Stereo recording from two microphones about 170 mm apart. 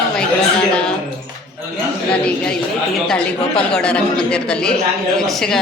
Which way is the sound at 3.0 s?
5° left (ahead or behind).